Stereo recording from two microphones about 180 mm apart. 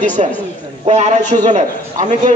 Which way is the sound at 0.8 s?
35° right (ahead or behind).